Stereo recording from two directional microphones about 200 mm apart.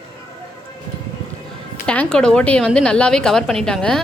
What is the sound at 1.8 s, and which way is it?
Speech, 5° left (ahead or behind).